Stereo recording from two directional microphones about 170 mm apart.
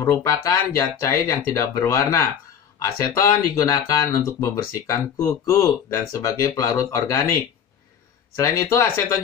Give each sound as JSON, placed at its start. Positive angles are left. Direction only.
{"t": 0.0, "sound": "speech", "side_deg": 15}
{"t": 8.4, "sound": "speech", "side_deg": 20}